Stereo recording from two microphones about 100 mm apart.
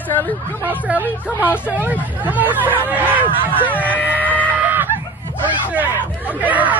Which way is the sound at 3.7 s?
15° left (ahead or behind).